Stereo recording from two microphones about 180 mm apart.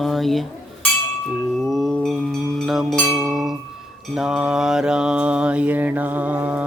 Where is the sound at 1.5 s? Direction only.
Centre (ahead or behind).